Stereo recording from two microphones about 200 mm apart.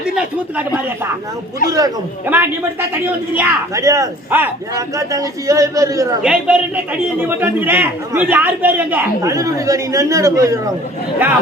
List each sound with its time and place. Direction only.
0.5 s a man's voice: 10° right (ahead or behind)
6.2 s a man's voice: 5° right (ahead or behind)